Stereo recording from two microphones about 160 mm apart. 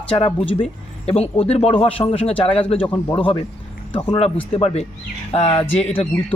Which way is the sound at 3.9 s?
30° left (ahead or behind).